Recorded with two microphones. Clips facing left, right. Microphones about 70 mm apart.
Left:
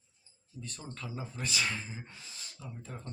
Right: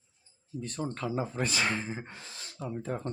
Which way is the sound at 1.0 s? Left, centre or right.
Right.